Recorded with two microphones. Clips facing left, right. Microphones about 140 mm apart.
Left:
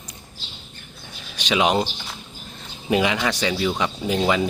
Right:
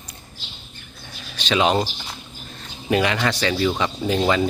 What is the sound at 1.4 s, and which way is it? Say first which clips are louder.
Speech: right 1 dB; 15° left (ahead or behind).